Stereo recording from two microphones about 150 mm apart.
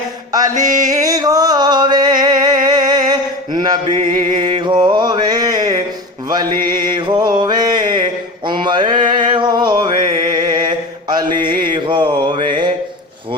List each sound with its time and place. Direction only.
0.5 s mantra: 60° right (ahead or behind)
0.9 s a sound: 25° right (ahead or behind)
2.6 s mantra: 30° right (ahead or behind)
4.0 s a sound: 30° right (ahead or behind)
4.6 s mantra: 30° right (ahead or behind)
8.4 s male singing: 30° right (ahead or behind)